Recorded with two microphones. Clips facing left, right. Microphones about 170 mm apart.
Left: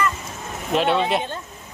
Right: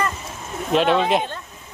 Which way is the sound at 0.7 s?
5° left (ahead or behind).